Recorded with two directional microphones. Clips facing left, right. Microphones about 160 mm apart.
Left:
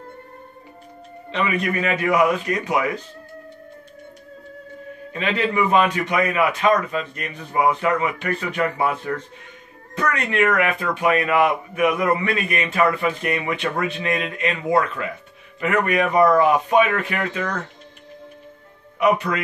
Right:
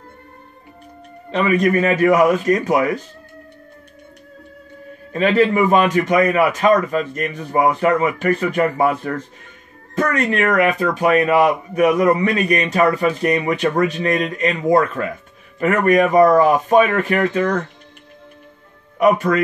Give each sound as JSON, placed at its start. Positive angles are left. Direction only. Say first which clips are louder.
{"t": 1.3, "sound": "a man's voice", "louder": "right 7 dB", "side_deg": -40}
{"t": 5.1, "sound": "a man's voice", "louder": "right 7 dB", "side_deg": -45}
{"t": 18.9, "sound": "a man's voice", "louder": "right 5 dB", "side_deg": -45}